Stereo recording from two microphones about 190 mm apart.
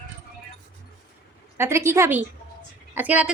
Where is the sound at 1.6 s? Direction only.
15° right (ahead or behind).